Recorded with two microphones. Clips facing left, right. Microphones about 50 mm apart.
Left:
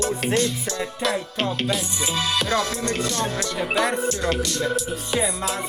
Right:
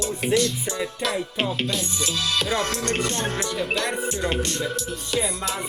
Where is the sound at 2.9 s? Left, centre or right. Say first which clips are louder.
Even; right.